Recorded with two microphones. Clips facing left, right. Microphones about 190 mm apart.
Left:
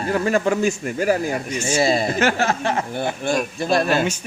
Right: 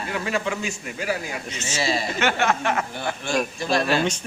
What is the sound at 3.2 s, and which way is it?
Speech, 50° left (ahead or behind).